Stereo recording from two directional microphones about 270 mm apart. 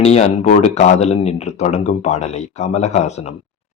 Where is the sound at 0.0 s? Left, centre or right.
Left.